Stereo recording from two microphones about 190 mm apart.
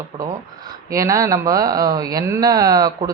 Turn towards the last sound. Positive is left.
turn(degrees=-20)  # may be behind; listen again after turning